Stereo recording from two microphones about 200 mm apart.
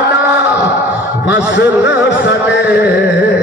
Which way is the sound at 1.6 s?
60° left (ahead or behind).